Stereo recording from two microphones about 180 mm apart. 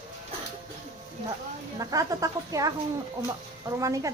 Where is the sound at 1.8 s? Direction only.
20° right (ahead or behind).